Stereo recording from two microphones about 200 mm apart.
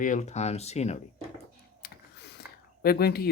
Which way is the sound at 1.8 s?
55° left (ahead or behind).